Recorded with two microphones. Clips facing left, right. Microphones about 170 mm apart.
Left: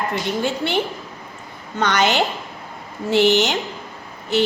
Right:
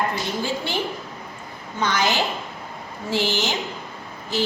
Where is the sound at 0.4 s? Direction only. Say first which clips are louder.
Left 4 dB; 65° left (ahead or behind).